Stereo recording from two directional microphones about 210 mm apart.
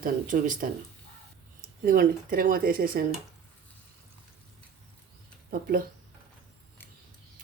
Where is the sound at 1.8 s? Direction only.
40° right (ahead or behind).